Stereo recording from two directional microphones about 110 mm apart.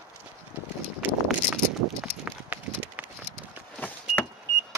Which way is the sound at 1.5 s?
15° right (ahead or behind).